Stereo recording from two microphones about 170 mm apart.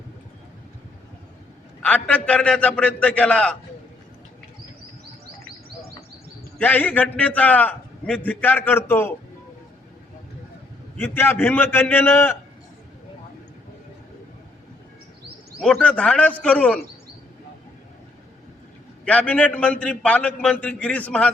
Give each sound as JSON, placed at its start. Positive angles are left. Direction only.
{"t": 1.8, "sound": "a man's voice", "side_deg": 10}
{"t": 6.6, "sound": "a man's voice", "side_deg": 10}
{"t": 11.0, "sound": "a man's voice", "side_deg": 10}
{"t": 15.6, "sound": "a man's voice", "side_deg": 5}
{"t": 19.0, "sound": "a man's voice", "side_deg": 10}